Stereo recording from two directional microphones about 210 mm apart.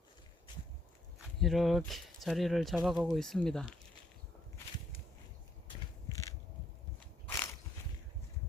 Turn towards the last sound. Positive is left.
turn(degrees=10)  # may be behind; listen again after turning